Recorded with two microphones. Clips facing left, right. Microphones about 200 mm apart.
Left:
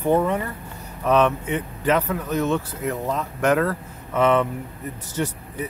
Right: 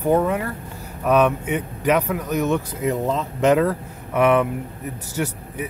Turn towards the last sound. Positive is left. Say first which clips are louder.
# right 1 dB
turn(degrees=-10)  # may be behind; listen again after turning